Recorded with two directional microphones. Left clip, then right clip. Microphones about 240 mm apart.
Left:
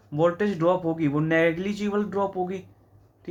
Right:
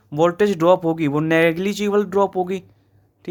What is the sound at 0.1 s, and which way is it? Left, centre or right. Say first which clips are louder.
Speech: right 6 dB; right.